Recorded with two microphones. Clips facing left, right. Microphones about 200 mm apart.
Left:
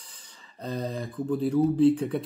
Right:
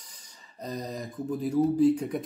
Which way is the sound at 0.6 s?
30° left (ahead or behind).